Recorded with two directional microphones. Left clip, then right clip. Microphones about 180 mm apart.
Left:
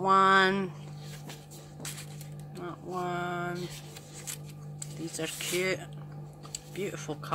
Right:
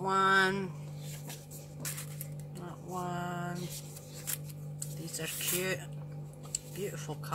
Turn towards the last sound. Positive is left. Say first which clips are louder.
# left 5 dB
turn(degrees=35)  # may be behind; listen again after turning